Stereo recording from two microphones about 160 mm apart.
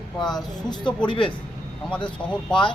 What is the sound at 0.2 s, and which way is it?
Speech, 5° left (ahead or behind).